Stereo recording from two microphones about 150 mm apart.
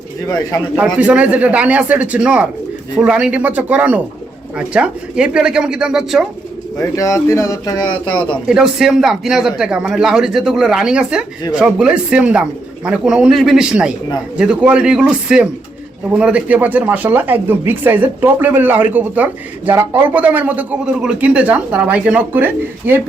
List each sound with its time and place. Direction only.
0.3 s speech: 25° left (ahead or behind)
0.8 s a man's voice: 10° right (ahead or behind)
6.7 s speech: 20° left (ahead or behind)
8.4 s a man's voice: 5° right (ahead or behind)